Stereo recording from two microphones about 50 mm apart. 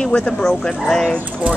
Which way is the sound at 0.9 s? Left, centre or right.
Centre.